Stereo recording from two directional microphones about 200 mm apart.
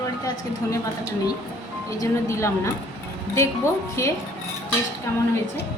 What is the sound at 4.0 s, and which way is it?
Speech, 15° left (ahead or behind).